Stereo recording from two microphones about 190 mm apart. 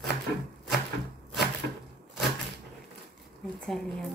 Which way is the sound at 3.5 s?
Centre (ahead or behind).